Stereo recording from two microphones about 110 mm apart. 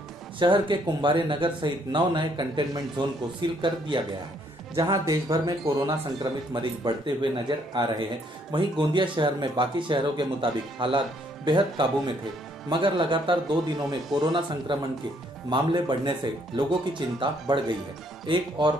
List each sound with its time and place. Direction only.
0.4 s speech: 50° right (ahead or behind)